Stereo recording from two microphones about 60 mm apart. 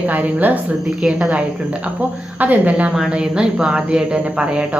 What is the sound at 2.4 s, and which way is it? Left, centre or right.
A woman's voice, right.